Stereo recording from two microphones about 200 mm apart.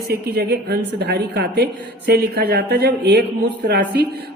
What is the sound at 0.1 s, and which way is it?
A woman's voice, 50° right (ahead or behind).